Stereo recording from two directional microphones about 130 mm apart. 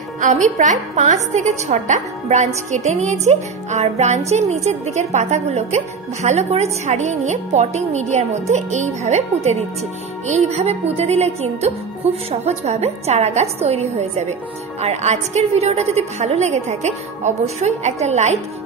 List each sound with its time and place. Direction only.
0.2 s a woman's voice: 70° right (ahead or behind)